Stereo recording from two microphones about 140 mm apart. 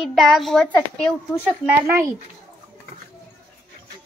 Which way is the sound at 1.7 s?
20° right (ahead or behind).